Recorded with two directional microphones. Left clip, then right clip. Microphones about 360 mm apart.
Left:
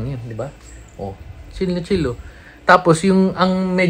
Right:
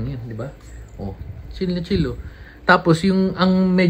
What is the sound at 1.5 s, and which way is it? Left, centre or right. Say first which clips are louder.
Speech: left 3 dB; centre.